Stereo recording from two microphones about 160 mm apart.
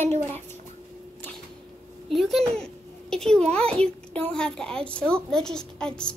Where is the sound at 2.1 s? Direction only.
Centre (ahead or behind).